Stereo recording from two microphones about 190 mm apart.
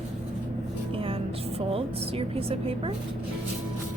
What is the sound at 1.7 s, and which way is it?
A woman's voice, 30° right (ahead or behind).